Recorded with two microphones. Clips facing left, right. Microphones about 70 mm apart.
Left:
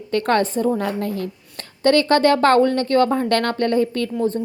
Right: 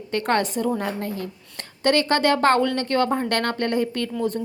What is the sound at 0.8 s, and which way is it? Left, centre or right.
Speech, right.